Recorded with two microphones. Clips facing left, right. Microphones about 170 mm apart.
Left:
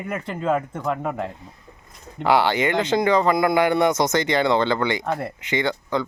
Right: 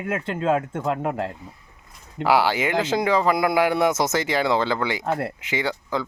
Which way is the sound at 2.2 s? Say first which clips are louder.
Left 1 dB; 5° right (ahead or behind).